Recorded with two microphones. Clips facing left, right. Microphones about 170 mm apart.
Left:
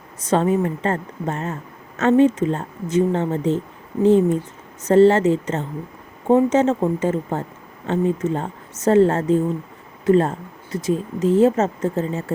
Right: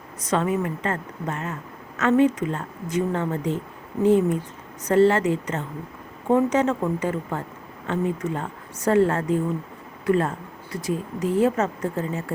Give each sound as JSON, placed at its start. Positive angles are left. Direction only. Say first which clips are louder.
{"t": 0.2, "sound": "speech", "louder": "left 5 dB", "side_deg": 30}